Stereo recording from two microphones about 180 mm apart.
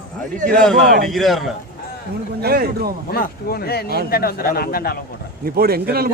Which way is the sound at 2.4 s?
60° right (ahead or behind).